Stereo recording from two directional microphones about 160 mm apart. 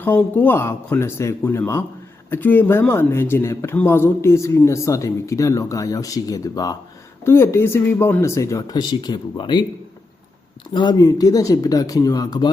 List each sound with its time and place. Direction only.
0.0 s speech: 10° left (ahead or behind); by 9.6 s 30° left (ahead or behind)
10.8 s speech: 25° left (ahead or behind)